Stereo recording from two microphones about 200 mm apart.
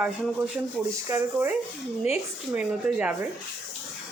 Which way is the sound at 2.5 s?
5° right (ahead or behind).